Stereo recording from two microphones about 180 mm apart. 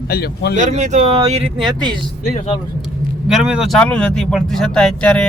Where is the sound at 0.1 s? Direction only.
60° left (ahead or behind).